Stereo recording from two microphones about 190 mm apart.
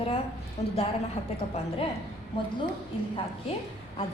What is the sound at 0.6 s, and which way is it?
Speech, 35° left (ahead or behind).